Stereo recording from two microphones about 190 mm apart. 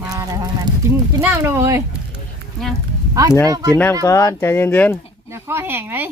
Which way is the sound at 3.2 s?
15° right (ahead or behind).